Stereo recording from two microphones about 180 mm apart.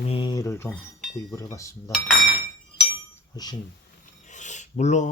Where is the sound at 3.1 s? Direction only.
20° left (ahead or behind).